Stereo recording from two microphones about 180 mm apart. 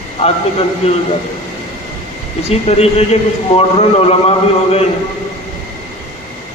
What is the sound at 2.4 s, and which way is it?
A man's voice, 35° left (ahead or behind).